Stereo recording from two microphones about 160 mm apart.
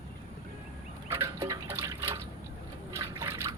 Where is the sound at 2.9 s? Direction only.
20° right (ahead or behind).